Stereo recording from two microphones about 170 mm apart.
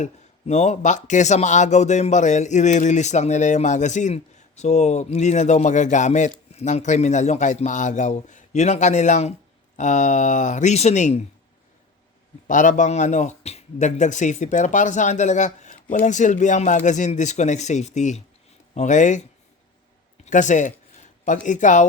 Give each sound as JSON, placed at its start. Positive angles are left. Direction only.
{"t": 0.0, "sound": "speech", "side_deg": 40}
{"t": 12.5, "sound": "speech", "side_deg": 50}
{"t": 20.2, "sound": "speech", "side_deg": 45}